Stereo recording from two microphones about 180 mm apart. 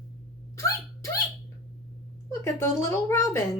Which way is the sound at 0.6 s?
20° left (ahead or behind).